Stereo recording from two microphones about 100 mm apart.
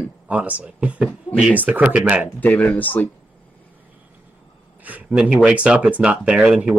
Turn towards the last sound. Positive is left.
turn(degrees=-10)  # may be behind; listen again after turning